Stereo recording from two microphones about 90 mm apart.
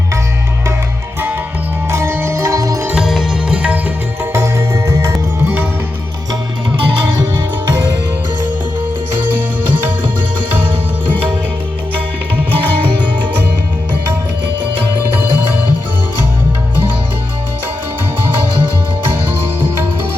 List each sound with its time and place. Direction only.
1.9 s music: 30° right (ahead or behind)
2.8 s music: 10° right (ahead or behind)
4.2 s music: 30° right (ahead or behind)
6.7 s music: 60° right (ahead or behind)
12.8 s music: 20° right (ahead or behind)